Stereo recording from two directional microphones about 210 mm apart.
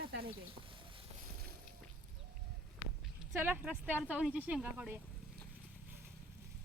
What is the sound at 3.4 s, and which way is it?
Speech, 10° right (ahead or behind).